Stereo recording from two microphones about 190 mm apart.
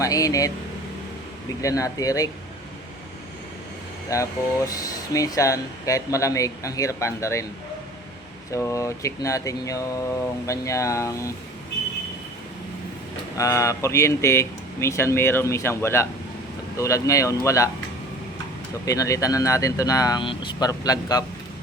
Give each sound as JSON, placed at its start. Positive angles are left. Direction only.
{"t": 0.0, "sound": "speech", "side_deg": 20}
{"t": 1.6, "sound": "speech", "side_deg": 15}
{"t": 4.1, "sound": "speech", "side_deg": 15}
{"t": 8.5, "sound": "speech", "side_deg": 15}
{"t": 13.3, "sound": "speech", "side_deg": 15}
{"t": 18.9, "sound": "speech", "side_deg": 15}